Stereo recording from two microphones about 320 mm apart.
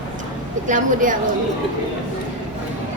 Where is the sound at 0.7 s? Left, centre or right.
Right.